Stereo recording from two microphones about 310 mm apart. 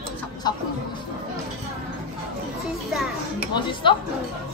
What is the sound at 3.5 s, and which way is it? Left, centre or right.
Speech, centre.